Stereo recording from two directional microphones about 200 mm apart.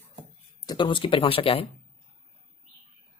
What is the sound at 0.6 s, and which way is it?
Speech, 20° left (ahead or behind).